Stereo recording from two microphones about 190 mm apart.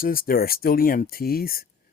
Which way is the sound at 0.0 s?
50° left (ahead or behind).